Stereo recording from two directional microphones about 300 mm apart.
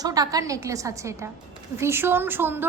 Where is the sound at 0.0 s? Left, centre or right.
Centre.